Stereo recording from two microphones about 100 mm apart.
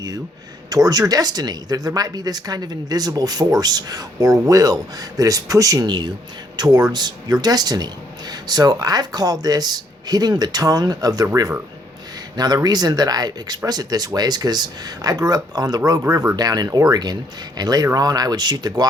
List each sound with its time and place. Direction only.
0.7 s speech: 40° right (ahead or behind)
12.6 s speech: 40° right (ahead or behind)